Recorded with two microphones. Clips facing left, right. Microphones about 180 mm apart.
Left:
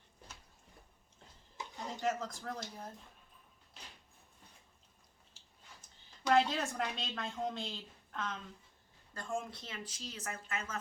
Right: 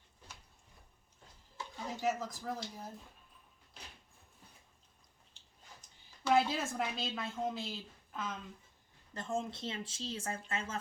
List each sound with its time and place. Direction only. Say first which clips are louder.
1.9 s a woman's voice: right 1 dB; 5° right (ahead or behind)
5.4 s a sound: left 1 dB; 5° left (ahead or behind)
6.2 s a woman's voice: even; 5° right (ahead or behind)
9.1 s speech: right 2 dB; 25° right (ahead or behind)